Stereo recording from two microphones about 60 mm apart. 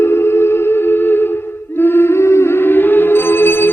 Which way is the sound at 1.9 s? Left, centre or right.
Left.